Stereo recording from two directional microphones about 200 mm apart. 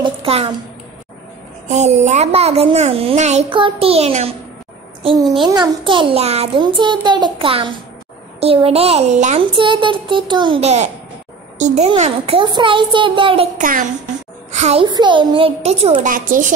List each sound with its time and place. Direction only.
0.0 s a child's voice: 30° right (ahead or behind)
1.7 s a child's voice: 35° right (ahead or behind)
5.4 s a child's voice: 20° right (ahead or behind)
13.6 s a child's voice: 45° right (ahead or behind)
14.9 s a child's voice: 20° right (ahead or behind); by 16.5 s 40° right (ahead or behind)